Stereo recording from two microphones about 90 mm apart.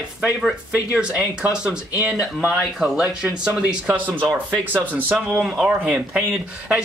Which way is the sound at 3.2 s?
10° right (ahead or behind).